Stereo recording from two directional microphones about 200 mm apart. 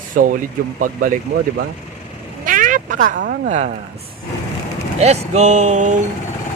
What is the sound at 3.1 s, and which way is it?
Speech, 60° right (ahead or behind).